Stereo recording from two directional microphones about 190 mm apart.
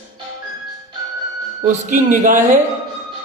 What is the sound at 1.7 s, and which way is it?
Speech, 40° right (ahead or behind).